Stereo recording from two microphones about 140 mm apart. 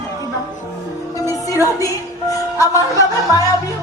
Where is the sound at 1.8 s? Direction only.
25° left (ahead or behind).